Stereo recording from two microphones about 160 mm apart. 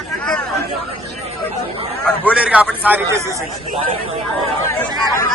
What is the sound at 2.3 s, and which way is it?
Speech, 10° right (ahead or behind).